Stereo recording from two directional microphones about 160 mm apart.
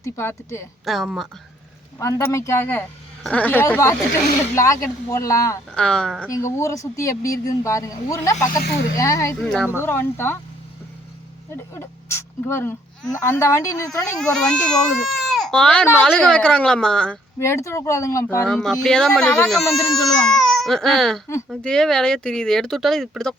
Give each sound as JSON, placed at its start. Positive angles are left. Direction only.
{"t": 0.0, "sound": "speech", "side_deg": 15}
{"t": 0.9, "sound": "speech", "side_deg": 0}
{"t": 2.0, "sound": "speech", "side_deg": 20}
{"t": 5.7, "sound": "speech", "side_deg": 5}
{"t": 6.3, "sound": "speech", "side_deg": 20}
{"t": 8.5, "sound": "speech", "side_deg": 85}
{"t": 9.0, "sound": "speech", "side_deg": 20}
{"t": 9.4, "sound": "speech", "side_deg": 5}
{"t": 11.5, "sound": "speech", "side_deg": 15}
{"t": 14.2, "sound": "speech", "side_deg": 5}
{"t": 17.4, "sound": "speech", "side_deg": 15}
{"t": 18.4, "sound": "speech", "side_deg": 5}